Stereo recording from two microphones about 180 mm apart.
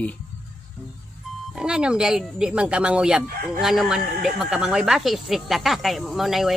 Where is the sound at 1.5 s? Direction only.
5° right (ahead or behind).